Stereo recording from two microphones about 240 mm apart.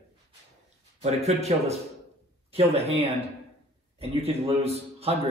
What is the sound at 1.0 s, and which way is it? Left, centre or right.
A man's voice, right.